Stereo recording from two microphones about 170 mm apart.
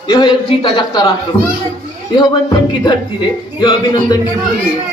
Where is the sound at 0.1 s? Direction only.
25° left (ahead or behind).